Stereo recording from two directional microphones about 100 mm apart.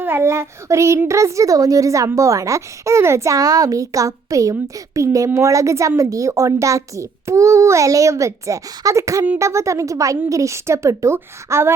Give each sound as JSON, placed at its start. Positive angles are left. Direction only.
{"t": 0.0, "sound": "a woman's voice", "side_deg": -25}